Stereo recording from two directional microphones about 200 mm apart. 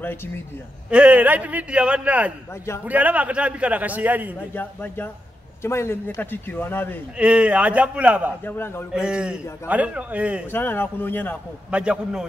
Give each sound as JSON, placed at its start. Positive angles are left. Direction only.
{"t": 0.8, "sound": "a man's voice", "side_deg": -5}
{"t": 4.6, "sound": "a man's voice", "side_deg": 10}
{"t": 7.2, "sound": "a man's voice", "side_deg": -5}
{"t": 8.5, "sound": "a man's voice", "side_deg": 10}
{"t": 8.9, "sound": "a man's voice", "side_deg": -5}
{"t": 10.5, "sound": "a man's voice", "side_deg": 10}
{"t": 11.7, "sound": "a man's voice", "side_deg": -5}